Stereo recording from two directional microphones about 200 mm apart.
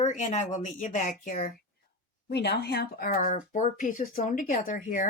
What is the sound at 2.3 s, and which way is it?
Speech, 55° left (ahead or behind).